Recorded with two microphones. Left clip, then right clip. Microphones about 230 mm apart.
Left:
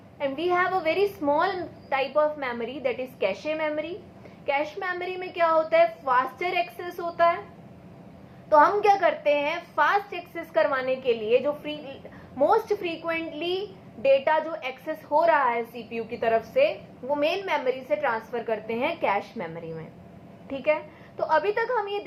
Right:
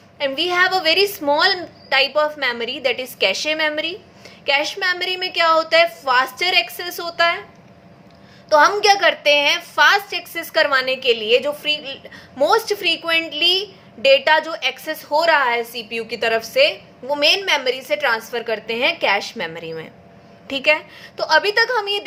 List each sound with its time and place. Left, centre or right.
0.2 s a woman's voice: right
8.4 s a woman's voice: right